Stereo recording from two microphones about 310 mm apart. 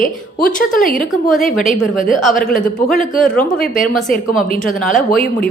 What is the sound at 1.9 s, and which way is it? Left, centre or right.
Speech, left.